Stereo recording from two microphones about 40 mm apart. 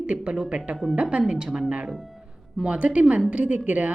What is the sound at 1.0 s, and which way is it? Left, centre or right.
A woman's voice, right.